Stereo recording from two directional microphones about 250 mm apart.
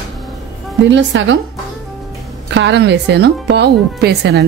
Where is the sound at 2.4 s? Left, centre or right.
Right.